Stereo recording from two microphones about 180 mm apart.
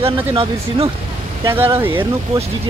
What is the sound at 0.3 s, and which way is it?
Speech, 30° right (ahead or behind).